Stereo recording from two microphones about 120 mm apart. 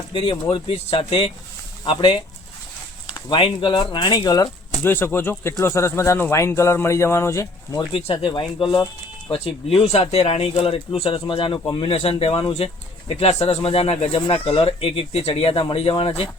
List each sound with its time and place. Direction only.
0.1 s speech: 50° left (ahead or behind); by 4.4 s 35° left (ahead or behind)
4.8 s speech: 20° left (ahead or behind)
7.9 s speech: 50° left (ahead or behind)
14.3 s speech: 45° left (ahead or behind)